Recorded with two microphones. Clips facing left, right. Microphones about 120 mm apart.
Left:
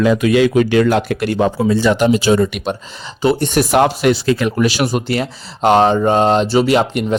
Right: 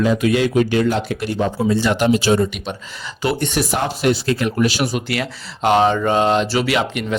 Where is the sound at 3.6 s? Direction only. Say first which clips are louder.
Left 7 dB; 80° left.